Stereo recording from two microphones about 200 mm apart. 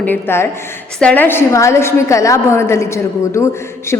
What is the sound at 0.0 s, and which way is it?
A woman's voice, 10° left (ahead or behind).